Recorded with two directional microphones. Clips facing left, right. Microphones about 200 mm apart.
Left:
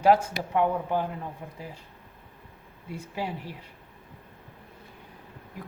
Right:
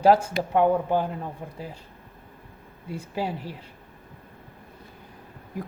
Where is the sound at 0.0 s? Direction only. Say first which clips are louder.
Right 2 dB; 35° right (ahead or behind).